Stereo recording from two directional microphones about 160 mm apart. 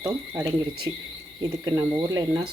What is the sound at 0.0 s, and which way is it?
Speech, 20° right (ahead or behind).